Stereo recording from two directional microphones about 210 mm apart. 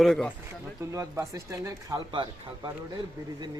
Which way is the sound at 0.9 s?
15° right (ahead or behind).